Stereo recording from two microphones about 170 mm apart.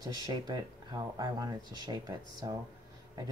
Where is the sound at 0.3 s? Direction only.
25° right (ahead or behind).